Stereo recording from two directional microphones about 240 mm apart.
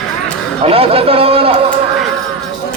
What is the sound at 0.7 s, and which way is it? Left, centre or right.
Speech, right.